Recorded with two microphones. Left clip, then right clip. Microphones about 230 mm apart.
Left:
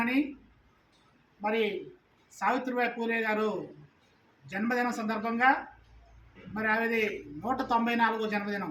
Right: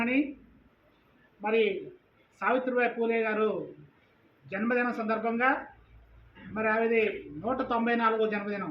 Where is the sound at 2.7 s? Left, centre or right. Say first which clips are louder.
Right 3 dB; left.